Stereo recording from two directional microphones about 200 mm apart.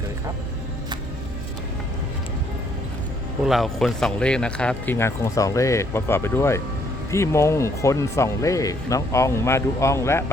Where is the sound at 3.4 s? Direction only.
Centre (ahead or behind).